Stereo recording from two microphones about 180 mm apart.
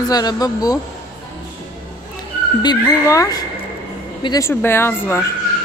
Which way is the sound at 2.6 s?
20° left (ahead or behind).